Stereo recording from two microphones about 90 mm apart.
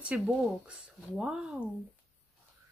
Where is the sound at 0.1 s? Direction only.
10° right (ahead or behind).